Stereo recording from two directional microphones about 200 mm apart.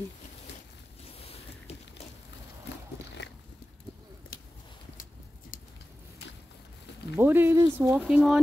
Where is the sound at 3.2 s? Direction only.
60° left (ahead or behind).